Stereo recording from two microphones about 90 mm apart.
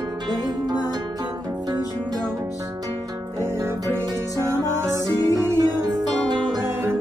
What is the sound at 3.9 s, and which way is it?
Music, 30° right (ahead or behind).